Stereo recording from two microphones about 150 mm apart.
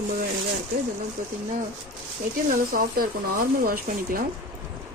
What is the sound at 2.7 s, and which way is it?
Speech, 75° right (ahead or behind).